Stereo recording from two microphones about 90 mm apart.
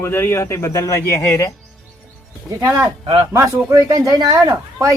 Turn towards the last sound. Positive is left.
turn(degrees=-40)  # may be behind; listen again after turning